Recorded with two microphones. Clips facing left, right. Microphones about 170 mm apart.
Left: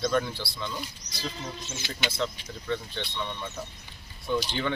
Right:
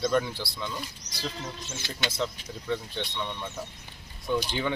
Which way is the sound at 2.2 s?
5° right (ahead or behind).